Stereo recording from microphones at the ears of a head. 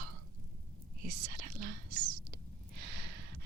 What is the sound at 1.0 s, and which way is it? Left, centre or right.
Whispering, right.